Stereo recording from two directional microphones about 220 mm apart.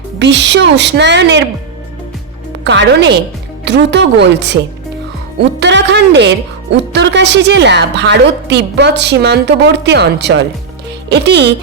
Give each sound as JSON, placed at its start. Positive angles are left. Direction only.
{"t": 0.2, "sound": "speech", "side_deg": -55}
{"t": 2.6, "sound": "speech", "side_deg": -55}